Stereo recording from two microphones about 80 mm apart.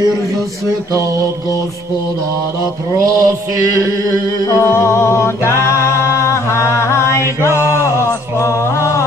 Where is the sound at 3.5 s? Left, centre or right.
Right.